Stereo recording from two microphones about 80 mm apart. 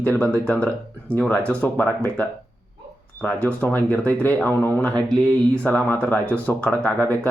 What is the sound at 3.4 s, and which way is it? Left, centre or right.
Speech, left.